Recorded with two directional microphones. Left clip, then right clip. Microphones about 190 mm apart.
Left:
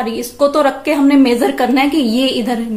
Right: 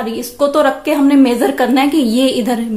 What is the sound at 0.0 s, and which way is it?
A woman's voice, 15° right (ahead or behind).